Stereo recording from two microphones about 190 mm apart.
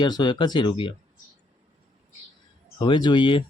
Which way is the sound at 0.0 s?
25° left (ahead or behind).